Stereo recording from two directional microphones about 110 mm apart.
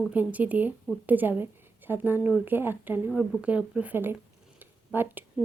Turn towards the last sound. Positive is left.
turn(degrees=-15)  # may be behind; listen again after turning